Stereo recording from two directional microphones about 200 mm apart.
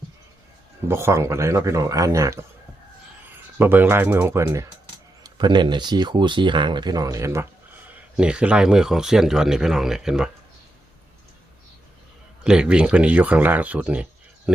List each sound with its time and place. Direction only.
0.9 s speech: 15° right (ahead or behind)
12.5 s speech: 5° right (ahead or behind)